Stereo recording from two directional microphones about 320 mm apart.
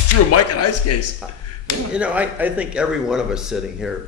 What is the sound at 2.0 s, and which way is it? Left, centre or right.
Speech, centre.